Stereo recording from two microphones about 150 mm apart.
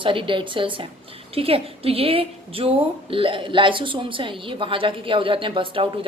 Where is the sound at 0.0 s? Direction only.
35° right (ahead or behind).